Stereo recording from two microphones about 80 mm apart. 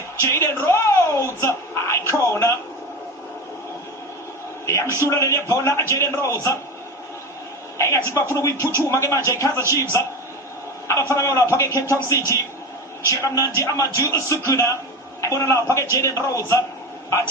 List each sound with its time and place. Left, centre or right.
0.2 s a sound: left
4.6 s a man's voice: left
7.8 s a man's voice: left
10.8 s a man's voice: left